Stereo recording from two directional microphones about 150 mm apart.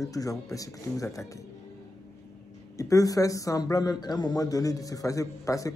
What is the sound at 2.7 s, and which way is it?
Speech, 20° left (ahead or behind).